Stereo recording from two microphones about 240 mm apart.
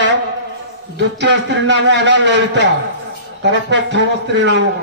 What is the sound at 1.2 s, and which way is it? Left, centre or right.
A man's voice, right.